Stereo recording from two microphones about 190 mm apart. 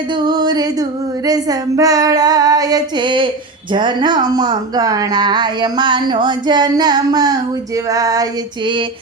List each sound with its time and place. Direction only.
0.2 s speech: 20° right (ahead or behind)